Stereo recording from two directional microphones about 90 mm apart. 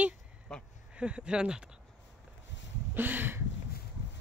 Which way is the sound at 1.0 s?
10° right (ahead or behind).